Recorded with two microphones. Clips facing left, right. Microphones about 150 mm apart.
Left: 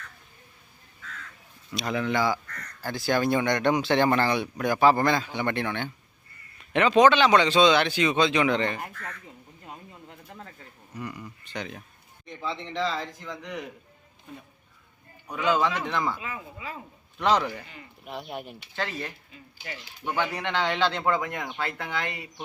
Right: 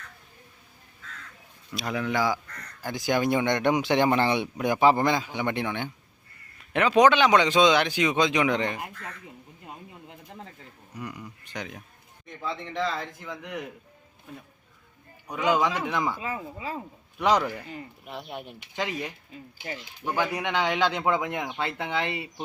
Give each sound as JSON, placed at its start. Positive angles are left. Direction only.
{"t": 1.7, "sound": "speech", "side_deg": -5}
{"t": 10.9, "sound": "speech", "side_deg": -10}
{"t": 15.3, "sound": "speech", "side_deg": -15}
{"t": 16.2, "sound": "speech", "side_deg": -35}
{"t": 17.2, "sound": "speech", "side_deg": -10}
{"t": 18.7, "sound": "speech", "side_deg": -15}